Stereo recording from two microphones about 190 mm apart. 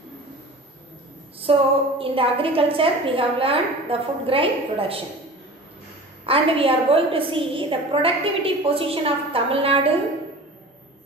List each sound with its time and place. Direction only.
1.4 s a woman's voice: 30° right (ahead or behind)
6.2 s a woman's voice: 30° right (ahead or behind)